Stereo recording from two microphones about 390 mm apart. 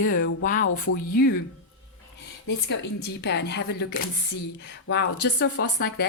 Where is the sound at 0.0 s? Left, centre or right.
Left.